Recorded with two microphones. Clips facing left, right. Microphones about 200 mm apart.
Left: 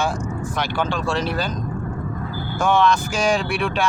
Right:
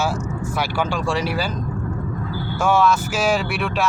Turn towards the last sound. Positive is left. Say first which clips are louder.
# even
turn(degrees=-5)  # may be behind; listen again after turning